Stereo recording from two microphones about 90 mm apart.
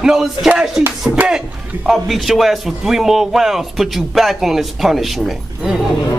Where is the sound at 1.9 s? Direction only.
Centre (ahead or behind).